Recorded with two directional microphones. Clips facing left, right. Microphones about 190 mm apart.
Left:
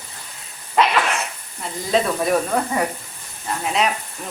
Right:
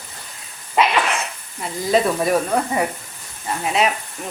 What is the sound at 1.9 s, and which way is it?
Speech, 5° right (ahead or behind).